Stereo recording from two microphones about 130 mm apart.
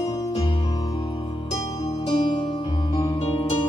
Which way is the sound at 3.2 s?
50° left (ahead or behind).